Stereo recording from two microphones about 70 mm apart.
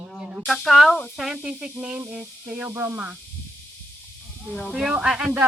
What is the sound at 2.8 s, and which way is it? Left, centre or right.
Speech, right.